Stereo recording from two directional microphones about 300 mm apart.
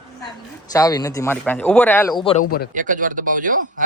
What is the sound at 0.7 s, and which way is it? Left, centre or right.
Speech, centre.